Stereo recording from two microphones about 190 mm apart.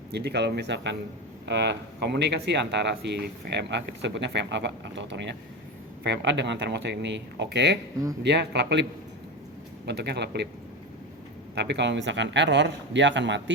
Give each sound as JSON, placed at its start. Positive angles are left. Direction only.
{"t": 0.1, "sound": "speech", "side_deg": -60}
{"t": 11.5, "sound": "speech", "side_deg": -65}